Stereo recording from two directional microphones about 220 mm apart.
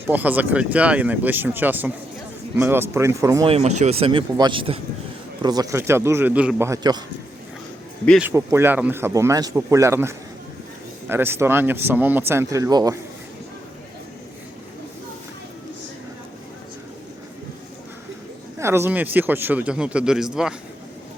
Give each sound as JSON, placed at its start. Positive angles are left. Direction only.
{"t": 0.1, "sound": "speech", "side_deg": -10}
{"t": 3.5, "sound": "speech", "side_deg": -30}
{"t": 8.2, "sound": "speech", "side_deg": -10}
{"t": 18.6, "sound": "speech", "side_deg": -10}